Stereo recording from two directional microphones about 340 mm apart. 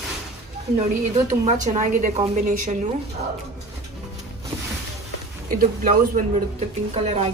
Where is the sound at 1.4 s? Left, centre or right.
Right.